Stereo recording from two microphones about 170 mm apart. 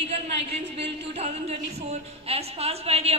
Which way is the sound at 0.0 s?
35° right (ahead or behind).